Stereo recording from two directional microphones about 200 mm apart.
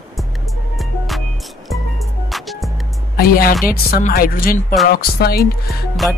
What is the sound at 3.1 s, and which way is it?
Speech, 45° left (ahead or behind).